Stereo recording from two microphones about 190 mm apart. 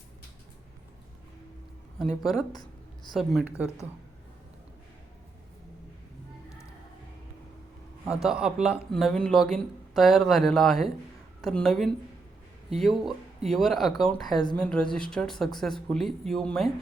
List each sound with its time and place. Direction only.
2.0 s speech: centre (ahead or behind)
2.5 s writing: 20° left (ahead or behind)
3.1 s speech: centre (ahead or behind)
8.0 s a woman's voice: 5° right (ahead or behind)